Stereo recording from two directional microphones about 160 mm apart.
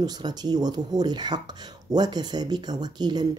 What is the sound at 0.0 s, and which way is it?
Speech, 25° right (ahead or behind).